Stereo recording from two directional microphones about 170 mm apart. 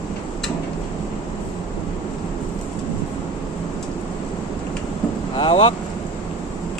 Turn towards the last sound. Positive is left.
turn(degrees=30)  # may be behind; listen again after turning